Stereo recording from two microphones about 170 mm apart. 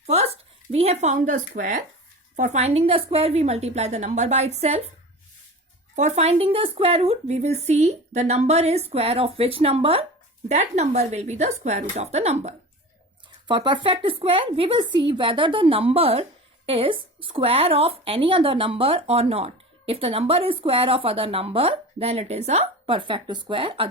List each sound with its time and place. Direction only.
0.0 s a woman's voice: 40° right (ahead or behind)
6.0 s a woman's voice: 40° right (ahead or behind)
13.5 s a woman's voice: 30° right (ahead or behind)